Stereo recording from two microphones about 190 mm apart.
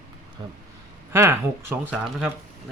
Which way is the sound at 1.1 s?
15° right (ahead or behind).